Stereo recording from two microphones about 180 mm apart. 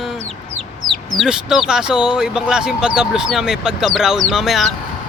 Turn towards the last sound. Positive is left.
turn(degrees=0)  # may be behind; listen again after turning